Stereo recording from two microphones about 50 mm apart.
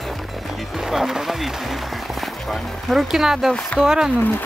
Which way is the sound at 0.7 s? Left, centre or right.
Centre.